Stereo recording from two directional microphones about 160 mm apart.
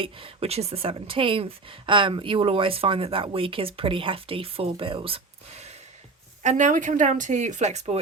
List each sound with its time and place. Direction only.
0.0 s a woman's voice: 35° right (ahead or behind)
6.4 s speech: 50° right (ahead or behind)